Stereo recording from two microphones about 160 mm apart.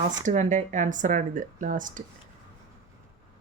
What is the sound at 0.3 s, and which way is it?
Speech, 50° right (ahead or behind).